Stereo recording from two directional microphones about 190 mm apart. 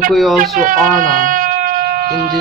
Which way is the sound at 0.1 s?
Centre (ahead or behind).